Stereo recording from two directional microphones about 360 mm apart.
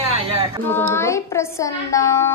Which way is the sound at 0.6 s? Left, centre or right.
Centre.